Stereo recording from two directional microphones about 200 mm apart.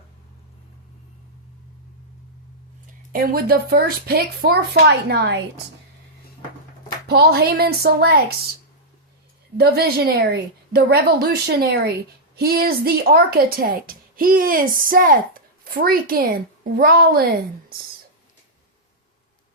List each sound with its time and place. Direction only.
3.1 s a woman's voice: 45° right (ahead or behind)
7.1 s a woman's voice: 50° right (ahead or behind)
9.6 s a woman's voice: 50° right (ahead or behind)